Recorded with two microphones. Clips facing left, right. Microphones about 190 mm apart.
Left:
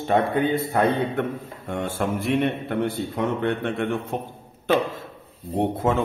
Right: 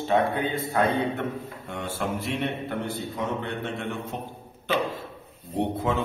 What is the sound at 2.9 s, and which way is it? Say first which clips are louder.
A man's voice: left 4 dB; 65° left (ahead or behind).